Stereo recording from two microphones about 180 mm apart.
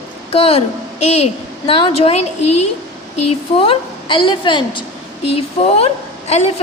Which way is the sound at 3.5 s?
30° left (ahead or behind).